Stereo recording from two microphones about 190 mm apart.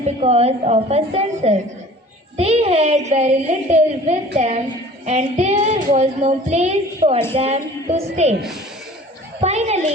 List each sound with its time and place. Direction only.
0.2 s child singing: 35° right (ahead or behind)
9.4 s child singing: 35° right (ahead or behind)